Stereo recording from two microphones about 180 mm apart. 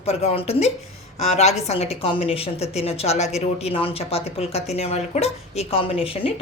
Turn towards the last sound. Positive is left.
turn(degrees=30)  # may be behind; listen again after turning